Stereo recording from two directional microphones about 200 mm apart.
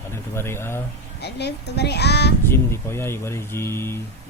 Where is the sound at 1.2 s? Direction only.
55° left (ahead or behind).